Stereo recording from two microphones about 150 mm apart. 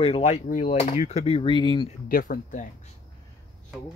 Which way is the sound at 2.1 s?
70° left (ahead or behind).